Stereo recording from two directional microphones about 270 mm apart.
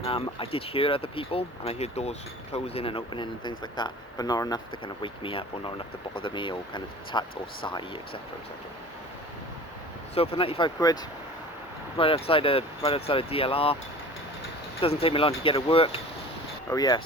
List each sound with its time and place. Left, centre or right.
0.0 s speech: centre
10.2 s speech: left
11.9 s speech: left
15.0 s speech: centre